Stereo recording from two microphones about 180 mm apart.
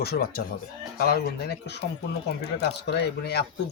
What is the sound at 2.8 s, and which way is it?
Speech, 70° left (ahead or behind).